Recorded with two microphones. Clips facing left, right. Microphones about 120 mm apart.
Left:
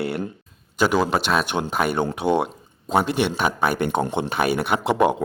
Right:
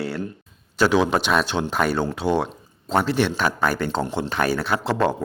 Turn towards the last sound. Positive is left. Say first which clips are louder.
# left 2 dB
turn(degrees=15)  # may be behind; listen again after turning